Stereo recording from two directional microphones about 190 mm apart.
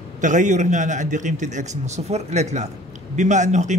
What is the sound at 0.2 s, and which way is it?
A man's voice, 40° right (ahead or behind).